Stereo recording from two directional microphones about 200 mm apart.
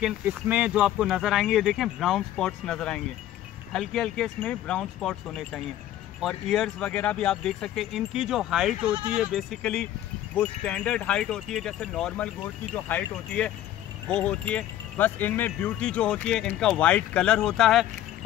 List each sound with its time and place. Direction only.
0.0 s speech: 5° right (ahead or behind)